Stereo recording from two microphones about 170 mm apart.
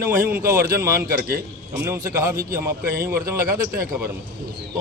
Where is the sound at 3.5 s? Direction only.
60° right (ahead or behind).